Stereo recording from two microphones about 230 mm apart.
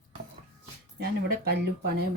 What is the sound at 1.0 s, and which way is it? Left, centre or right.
Speech, right.